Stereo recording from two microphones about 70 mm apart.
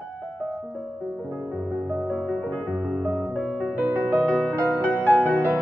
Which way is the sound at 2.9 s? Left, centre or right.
Centre.